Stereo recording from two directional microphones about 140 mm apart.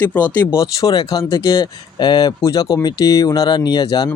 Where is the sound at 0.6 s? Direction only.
25° left (ahead or behind).